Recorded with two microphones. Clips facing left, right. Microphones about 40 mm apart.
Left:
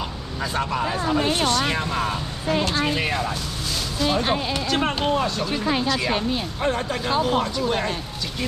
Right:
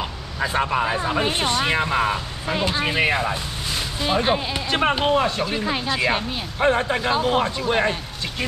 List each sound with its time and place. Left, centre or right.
0.4 s speech: right
6.6 s speech: right